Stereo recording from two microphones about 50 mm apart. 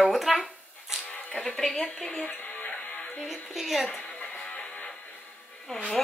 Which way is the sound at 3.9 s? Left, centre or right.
Centre.